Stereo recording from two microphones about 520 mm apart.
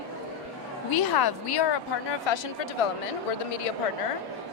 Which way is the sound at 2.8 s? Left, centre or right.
Left.